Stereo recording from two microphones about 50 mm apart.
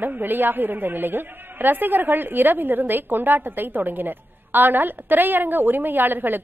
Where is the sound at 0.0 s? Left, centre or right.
Right.